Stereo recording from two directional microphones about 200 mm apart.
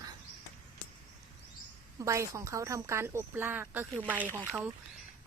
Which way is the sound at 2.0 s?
15° right (ahead or behind).